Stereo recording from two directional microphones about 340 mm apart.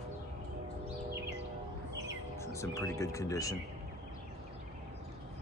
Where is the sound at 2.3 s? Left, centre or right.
Centre.